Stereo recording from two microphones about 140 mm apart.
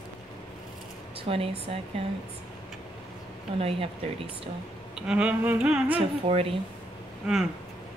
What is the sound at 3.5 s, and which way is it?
Speech, 45° right (ahead or behind).